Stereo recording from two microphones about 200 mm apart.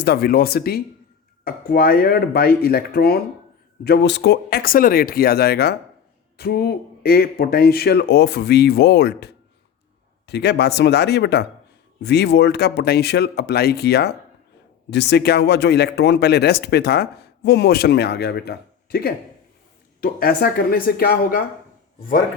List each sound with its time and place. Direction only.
0.0 s speech: 50° left (ahead or behind)